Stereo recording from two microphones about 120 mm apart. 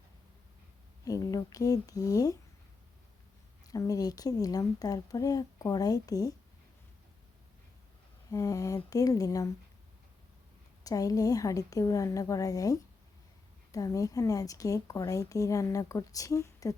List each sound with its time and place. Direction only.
1.0 s speech: 30° left (ahead or behind)
3.7 s a woman's voice: 30° left (ahead or behind)
8.3 s speech: 25° left (ahead or behind)
10.8 s speech: 30° left (ahead or behind)